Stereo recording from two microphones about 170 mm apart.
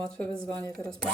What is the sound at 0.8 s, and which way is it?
Speech, 5° left (ahead or behind).